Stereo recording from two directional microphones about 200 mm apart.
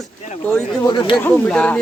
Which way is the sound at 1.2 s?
5° left (ahead or behind).